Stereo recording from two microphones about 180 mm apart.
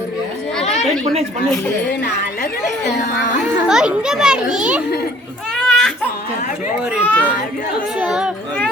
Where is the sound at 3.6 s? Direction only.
5° right (ahead or behind).